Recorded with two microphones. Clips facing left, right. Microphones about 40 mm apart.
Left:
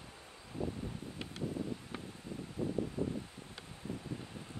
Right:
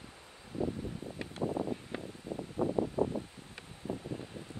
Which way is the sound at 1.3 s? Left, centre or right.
Right.